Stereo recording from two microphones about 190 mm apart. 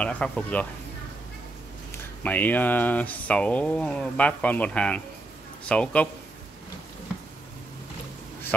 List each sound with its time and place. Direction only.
0.0 s speech: 5° left (ahead or behind)
2.2 s speech: 10° left (ahead or behind)